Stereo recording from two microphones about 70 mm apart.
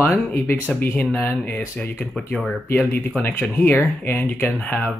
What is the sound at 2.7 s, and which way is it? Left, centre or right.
Speech, left.